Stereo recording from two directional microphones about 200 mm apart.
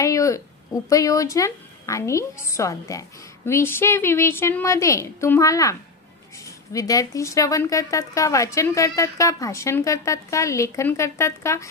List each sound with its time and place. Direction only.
0.0 s speech: 15° left (ahead or behind)